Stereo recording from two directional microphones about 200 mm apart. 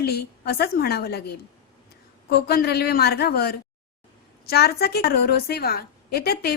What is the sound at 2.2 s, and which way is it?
A woman's voice, 50° left (ahead or behind).